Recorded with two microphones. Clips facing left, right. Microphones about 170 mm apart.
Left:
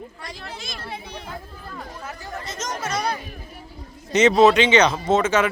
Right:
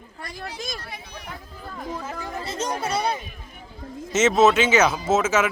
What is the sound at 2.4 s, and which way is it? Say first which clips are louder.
Speech: right 3 dB; 30° right (ahead or behind).